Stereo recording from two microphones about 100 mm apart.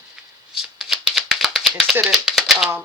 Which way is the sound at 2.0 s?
5° right (ahead or behind).